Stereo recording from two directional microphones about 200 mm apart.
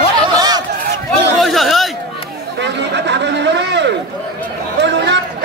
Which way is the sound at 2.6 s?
60° right (ahead or behind).